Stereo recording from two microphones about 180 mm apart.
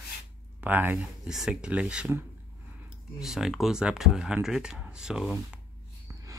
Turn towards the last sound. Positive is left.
turn(degrees=-20)  # may be behind; listen again after turning